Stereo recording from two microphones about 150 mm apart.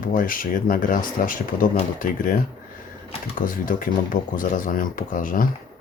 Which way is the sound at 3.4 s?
65° left (ahead or behind).